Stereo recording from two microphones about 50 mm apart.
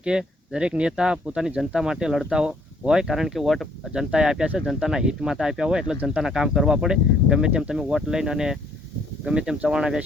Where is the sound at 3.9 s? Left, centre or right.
Centre.